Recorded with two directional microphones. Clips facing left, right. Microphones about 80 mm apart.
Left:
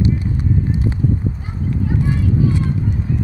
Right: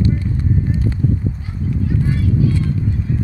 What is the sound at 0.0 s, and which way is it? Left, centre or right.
Clip-clop, centre.